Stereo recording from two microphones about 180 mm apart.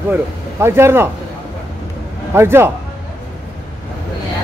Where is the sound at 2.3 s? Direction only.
15° right (ahead or behind).